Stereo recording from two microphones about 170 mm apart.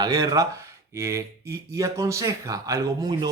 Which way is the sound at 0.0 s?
25° right (ahead or behind).